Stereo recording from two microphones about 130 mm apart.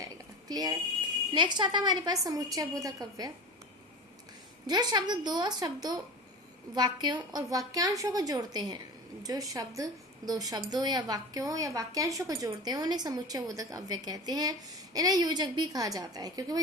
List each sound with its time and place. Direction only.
0.0 s a sound: 30° right (ahead or behind)
1.3 s a woman's voice: 35° right (ahead or behind)
4.6 s a woman's voice: 35° right (ahead or behind)